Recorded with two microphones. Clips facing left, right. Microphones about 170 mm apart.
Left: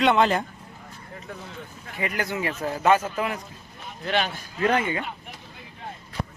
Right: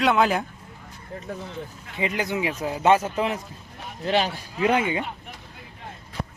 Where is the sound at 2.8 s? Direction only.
25° right (ahead or behind).